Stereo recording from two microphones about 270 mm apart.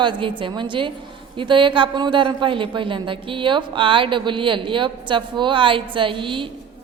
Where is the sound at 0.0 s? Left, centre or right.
Centre.